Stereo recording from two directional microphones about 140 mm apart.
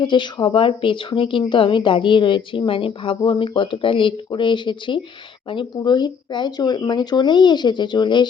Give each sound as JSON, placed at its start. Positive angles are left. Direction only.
{"t": 0.0, "sound": "speech", "side_deg": 35}